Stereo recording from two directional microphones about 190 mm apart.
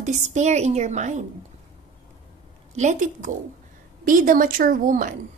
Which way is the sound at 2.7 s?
40° right (ahead or behind).